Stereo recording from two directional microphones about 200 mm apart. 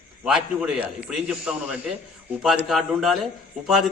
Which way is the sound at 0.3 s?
5° right (ahead or behind).